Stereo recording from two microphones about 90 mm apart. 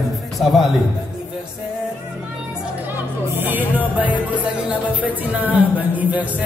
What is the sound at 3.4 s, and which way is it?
Music, 20° right (ahead or behind).